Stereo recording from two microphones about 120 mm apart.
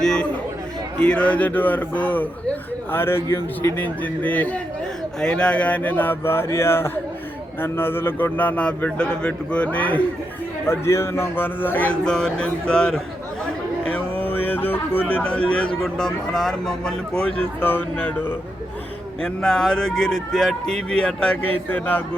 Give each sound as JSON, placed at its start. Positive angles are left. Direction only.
{"t": 0.0, "sound": "chatter", "side_deg": 5}
{"t": 0.9, "sound": "speech", "side_deg": 10}
{"t": 13.8, "sound": "a sound", "side_deg": 10}
{"t": 15.8, "sound": "a man's voice", "side_deg": 5}